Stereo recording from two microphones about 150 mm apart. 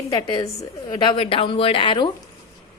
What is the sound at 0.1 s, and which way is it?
A woman's voice, 25° left (ahead or behind).